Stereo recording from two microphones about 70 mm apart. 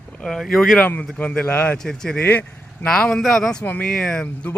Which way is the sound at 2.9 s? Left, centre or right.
Centre.